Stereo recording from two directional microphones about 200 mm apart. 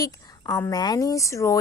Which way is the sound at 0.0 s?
20° left (ahead or behind).